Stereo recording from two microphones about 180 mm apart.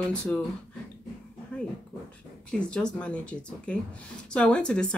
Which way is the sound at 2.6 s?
5° left (ahead or behind).